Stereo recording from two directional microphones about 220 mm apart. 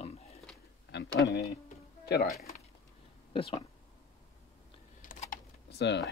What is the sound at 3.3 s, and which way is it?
Speech, 25° left (ahead or behind).